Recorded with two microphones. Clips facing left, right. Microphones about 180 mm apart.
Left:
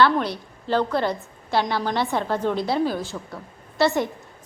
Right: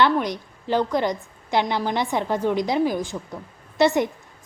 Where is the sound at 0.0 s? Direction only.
15° right (ahead or behind).